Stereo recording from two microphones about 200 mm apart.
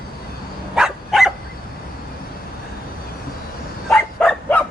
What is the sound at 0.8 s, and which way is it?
Dog, centre (ahead or behind).